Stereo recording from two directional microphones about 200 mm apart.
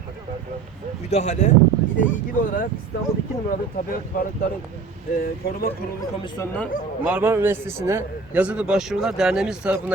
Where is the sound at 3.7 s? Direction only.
45° left (ahead or behind).